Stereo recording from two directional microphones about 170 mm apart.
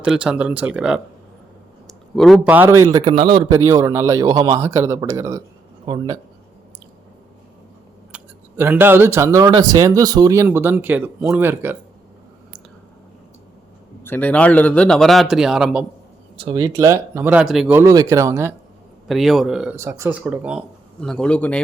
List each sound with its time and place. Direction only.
0.0 s a man's voice: 5° right (ahead or behind)
3.0 s a man's voice: 30° right (ahead or behind)
3.5 s a man's voice: 20° right (ahead or behind)
5.8 s a man's voice: 30° right (ahead or behind)
8.1 s speech: 10° right (ahead or behind)
14.0 s a man's voice: 10° left (ahead or behind)
16.4 s speech: 25° right (ahead or behind); by 17.7 s centre (ahead or behind)
17.7 s speech: 20° right (ahead or behind)
19.0 s a man's voice: centre (ahead or behind)
19.7 s a man's voice: 15° right (ahead or behind); by 21.6 s 5° left (ahead or behind)